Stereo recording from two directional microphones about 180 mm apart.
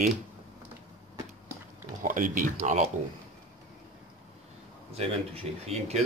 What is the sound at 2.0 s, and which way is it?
Speech, 50° right (ahead or behind).